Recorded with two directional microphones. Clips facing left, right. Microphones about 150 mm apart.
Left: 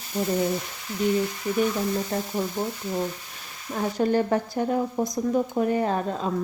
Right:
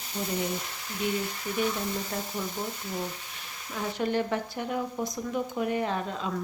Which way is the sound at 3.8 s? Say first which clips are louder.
Left 6 dB; 40° left (ahead or behind).